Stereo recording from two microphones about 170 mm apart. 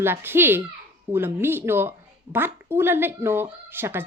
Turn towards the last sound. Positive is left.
turn(degrees=-15)  # may be behind; listen again after turning